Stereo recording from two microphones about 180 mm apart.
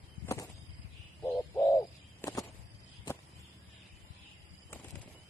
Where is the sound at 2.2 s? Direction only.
15° left (ahead or behind).